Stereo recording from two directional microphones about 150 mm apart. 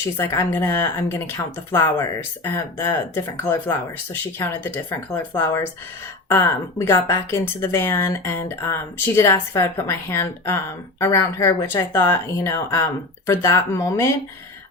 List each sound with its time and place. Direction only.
0.2 s a woman's voice: 20° left (ahead or behind)
4.1 s a woman's voice: 15° left (ahead or behind)